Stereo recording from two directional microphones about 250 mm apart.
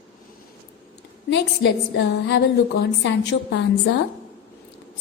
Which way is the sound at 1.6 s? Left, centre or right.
Left.